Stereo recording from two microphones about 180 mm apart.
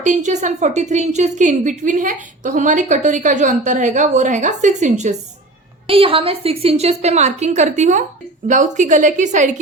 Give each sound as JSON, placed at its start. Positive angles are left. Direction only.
{"t": 0.0, "sound": "a woman's voice", "side_deg": -40}
{"t": 5.9, "sound": "a woman's voice", "side_deg": -30}